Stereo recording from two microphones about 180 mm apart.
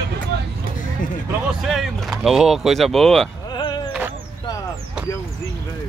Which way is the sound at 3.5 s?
25° left (ahead or behind).